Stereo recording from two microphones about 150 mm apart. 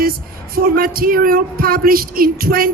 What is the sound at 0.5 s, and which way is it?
Speech, 75° right (ahead or behind).